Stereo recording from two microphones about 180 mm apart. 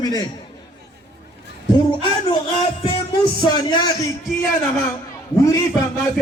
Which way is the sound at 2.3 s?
35° left (ahead or behind).